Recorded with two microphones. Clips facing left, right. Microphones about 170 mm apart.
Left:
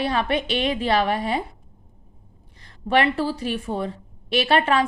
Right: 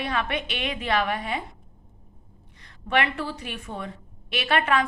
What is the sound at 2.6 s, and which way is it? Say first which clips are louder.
A woman's voice: left 5 dB; 35° left (ahead or behind).